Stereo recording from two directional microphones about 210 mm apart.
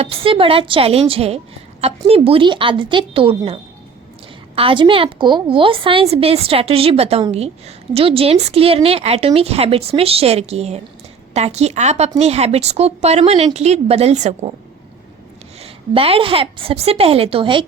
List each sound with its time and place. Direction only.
0.0 s a woman's voice: 25° right (ahead or behind)
15.6 s a woman's voice: 25° right (ahead or behind)